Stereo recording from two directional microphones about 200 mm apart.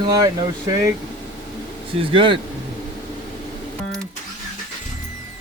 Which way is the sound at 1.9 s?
25° right (ahead or behind).